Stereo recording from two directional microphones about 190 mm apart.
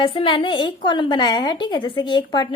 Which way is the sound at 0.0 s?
25° left (ahead or behind).